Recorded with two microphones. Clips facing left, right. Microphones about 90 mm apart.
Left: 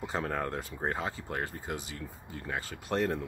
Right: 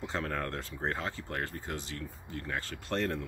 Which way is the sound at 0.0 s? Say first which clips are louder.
Left 2 dB; 15° left (ahead or behind).